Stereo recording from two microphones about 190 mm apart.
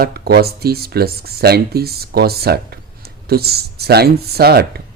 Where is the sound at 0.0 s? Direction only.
55° right (ahead or behind).